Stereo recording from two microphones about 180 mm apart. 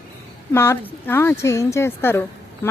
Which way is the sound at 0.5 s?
15° left (ahead or behind).